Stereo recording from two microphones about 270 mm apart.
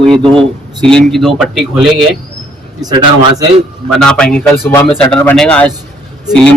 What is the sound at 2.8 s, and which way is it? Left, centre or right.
Speech, centre.